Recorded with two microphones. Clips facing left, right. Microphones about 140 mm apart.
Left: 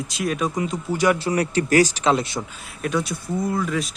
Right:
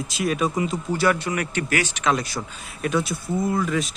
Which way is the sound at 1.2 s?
35° left (ahead or behind).